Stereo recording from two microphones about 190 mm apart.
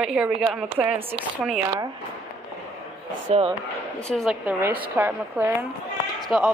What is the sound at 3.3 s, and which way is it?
Speech, 25° right (ahead or behind).